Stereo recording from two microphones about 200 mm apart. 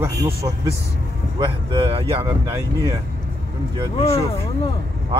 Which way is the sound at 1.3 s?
25° right (ahead or behind).